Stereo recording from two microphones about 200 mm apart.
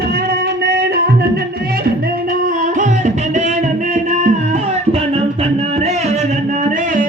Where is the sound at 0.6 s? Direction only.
55° right (ahead or behind).